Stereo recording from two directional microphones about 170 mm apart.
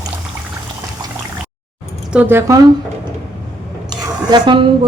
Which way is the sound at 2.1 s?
15° right (ahead or behind).